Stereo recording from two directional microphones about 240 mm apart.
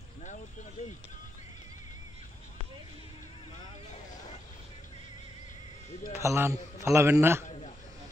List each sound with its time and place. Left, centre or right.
0.8 s speech: left
6.1 s a man's voice: centre
7.4 s a sound: left